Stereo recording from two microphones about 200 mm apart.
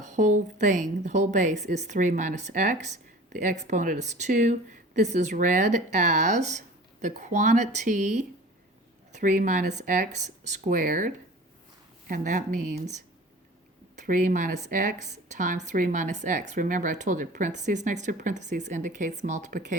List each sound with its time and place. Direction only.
0.0 s a woman's voice: 40° right (ahead or behind)
14.1 s a woman's voice: 40° right (ahead or behind)